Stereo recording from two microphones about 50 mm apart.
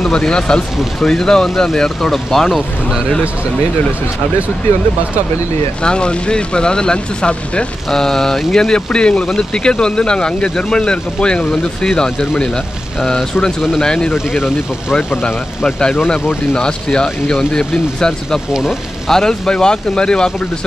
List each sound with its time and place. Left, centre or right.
0.0 s speech: centre
5.8 s speech: centre
7.9 s speech: centre
8.5 s speech: centre
14.1 s speech: centre
15.2 s speech: left
18.5 s speech: centre
19.0 s speech: centre